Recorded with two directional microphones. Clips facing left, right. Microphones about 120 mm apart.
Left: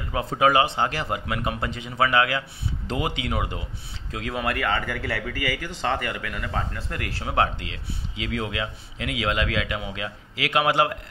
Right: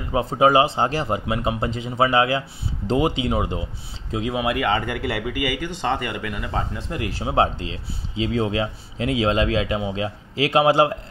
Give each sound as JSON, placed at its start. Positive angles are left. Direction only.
{"t": 0.1, "sound": "a man's voice", "side_deg": -25}